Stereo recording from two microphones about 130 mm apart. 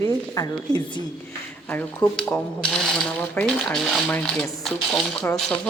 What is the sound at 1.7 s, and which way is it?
A woman's voice, 15° left (ahead or behind).